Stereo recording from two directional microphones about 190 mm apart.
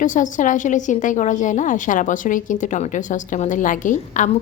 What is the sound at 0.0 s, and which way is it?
A woman's voice, 45° left (ahead or behind).